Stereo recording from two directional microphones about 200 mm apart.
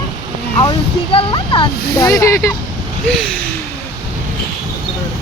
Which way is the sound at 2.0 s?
15° left (ahead or behind).